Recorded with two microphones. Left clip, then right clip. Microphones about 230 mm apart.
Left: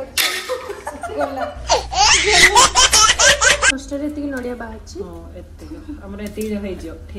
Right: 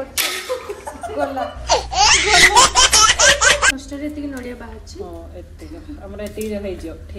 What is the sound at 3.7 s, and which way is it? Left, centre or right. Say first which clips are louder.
Speech: left 3 dB; centre.